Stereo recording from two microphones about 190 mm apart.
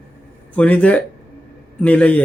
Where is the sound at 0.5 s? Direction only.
5° left (ahead or behind).